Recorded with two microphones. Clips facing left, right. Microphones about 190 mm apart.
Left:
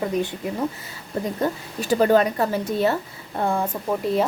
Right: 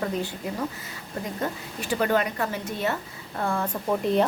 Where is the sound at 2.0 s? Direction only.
35° left (ahead or behind).